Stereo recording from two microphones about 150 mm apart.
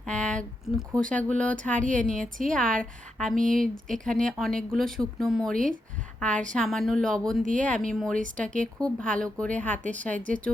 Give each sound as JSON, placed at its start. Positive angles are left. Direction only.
{"t": 0.1, "sound": "speech", "side_deg": 5}
{"t": 1.8, "sound": "a woman's voice", "side_deg": -60}
{"t": 2.5, "sound": "a woman's voice", "side_deg": 5}
{"t": 8.2, "sound": "a woman's voice", "side_deg": -60}
{"t": 8.6, "sound": "speech", "side_deg": 5}